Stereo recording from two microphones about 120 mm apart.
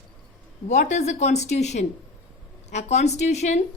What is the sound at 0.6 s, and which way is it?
A woman's voice, 75° left (ahead or behind).